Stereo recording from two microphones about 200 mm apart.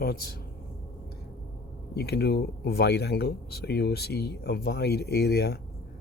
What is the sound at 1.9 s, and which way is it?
Speech, 55° left (ahead or behind).